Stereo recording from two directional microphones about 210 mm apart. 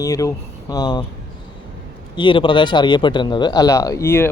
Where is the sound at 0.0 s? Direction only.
15° left (ahead or behind).